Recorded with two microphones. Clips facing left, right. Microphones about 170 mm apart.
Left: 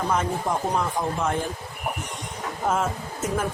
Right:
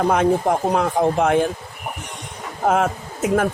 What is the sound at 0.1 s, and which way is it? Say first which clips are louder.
Speech: right 8 dB; 70° right (ahead or behind).